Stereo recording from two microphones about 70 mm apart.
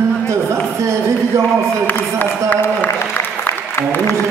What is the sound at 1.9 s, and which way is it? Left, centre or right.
A man's voice, left.